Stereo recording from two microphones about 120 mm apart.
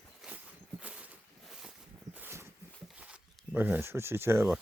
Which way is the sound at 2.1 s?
20° right (ahead or behind).